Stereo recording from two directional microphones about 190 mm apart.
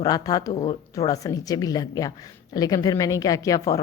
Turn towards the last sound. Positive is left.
turn(degrees=15)  # may be behind; listen again after turning